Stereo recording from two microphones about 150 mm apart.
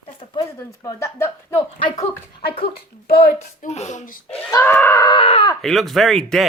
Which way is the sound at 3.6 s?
50° left (ahead or behind).